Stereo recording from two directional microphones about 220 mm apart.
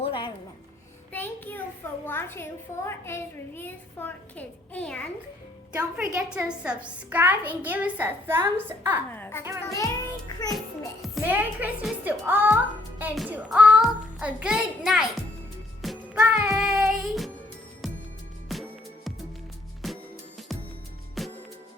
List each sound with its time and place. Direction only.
0.0 s a sound: 25° left (ahead or behind)
1.1 s child singing: 10° left (ahead or behind)
2.0 s a woman's voice: 10° left (ahead or behind)
6.1 s a child's voice: 5° right (ahead or behind)
9.1 s a woman's voice: 10° left (ahead or behind)
11.0 s a child's voice: 5° right (ahead or behind)
15.8 s music: centre (ahead or behind)